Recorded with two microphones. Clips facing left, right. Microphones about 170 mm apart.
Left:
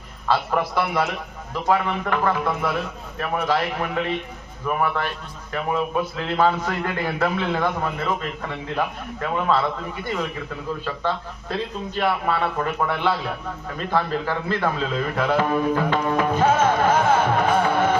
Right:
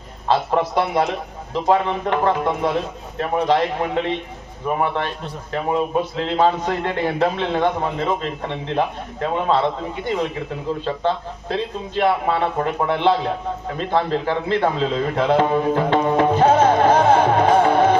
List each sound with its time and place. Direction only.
0.3 s a man's voice: 25° right (ahead or behind)
16.4 s music: 35° right (ahead or behind)